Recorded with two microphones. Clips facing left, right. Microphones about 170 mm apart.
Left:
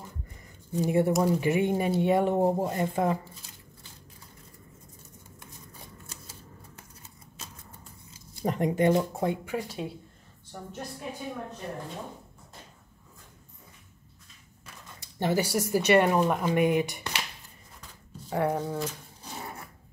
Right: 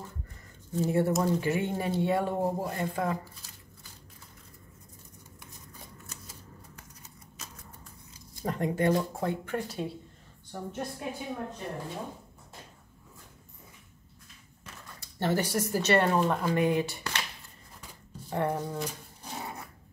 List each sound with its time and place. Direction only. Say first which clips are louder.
0.7 s speech: left 2 dB; 15° left (ahead or behind)
8.4 s speech: left 3 dB; 20° left (ahead or behind); by 10.7 s centre (ahead or behind)
15.0 s speech: left 2 dB; 15° left (ahead or behind)
18.3 s speech: left 3 dB; 5° left (ahead or behind)